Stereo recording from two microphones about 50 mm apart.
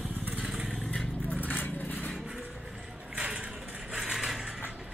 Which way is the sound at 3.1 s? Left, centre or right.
Right.